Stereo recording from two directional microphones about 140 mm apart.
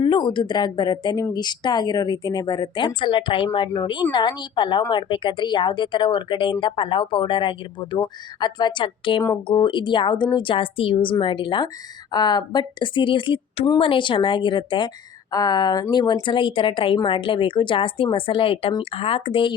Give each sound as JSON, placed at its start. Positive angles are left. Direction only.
{"t": 0.0, "sound": "speech", "side_deg": 35}